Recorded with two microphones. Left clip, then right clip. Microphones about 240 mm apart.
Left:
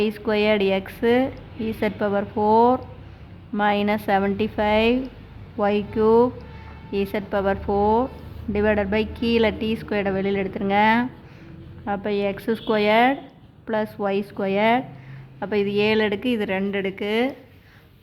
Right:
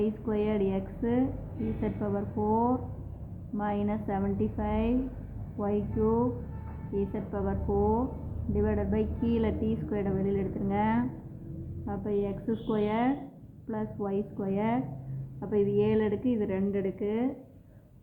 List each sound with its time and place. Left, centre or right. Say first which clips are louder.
0.0 s a woman's voice: left 9 dB; left